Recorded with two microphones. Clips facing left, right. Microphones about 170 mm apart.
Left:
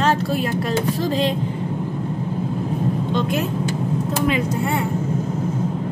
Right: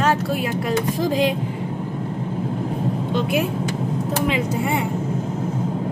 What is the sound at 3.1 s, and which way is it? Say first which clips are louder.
Speech: right 3 dB; 10° right (ahead or behind).